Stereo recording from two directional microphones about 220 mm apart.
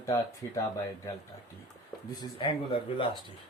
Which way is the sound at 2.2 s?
20° left (ahead or behind).